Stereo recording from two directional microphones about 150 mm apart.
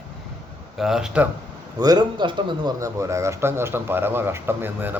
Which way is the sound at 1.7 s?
25° right (ahead or behind).